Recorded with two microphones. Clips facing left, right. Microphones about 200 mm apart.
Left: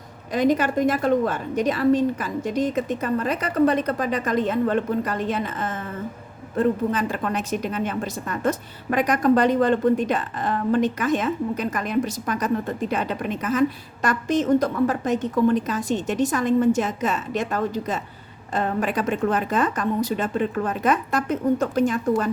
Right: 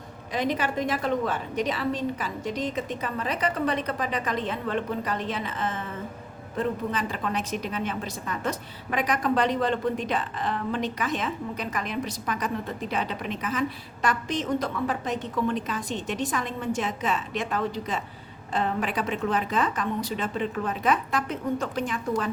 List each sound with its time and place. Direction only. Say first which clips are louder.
0.3 s a woman's voice: left 7 dB; 45° left (ahead or behind)